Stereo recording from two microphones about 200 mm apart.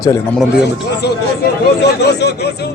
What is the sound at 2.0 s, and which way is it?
Speech, 55° left (ahead or behind).